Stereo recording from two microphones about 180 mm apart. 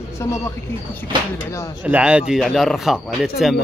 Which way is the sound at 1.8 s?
5° right (ahead or behind).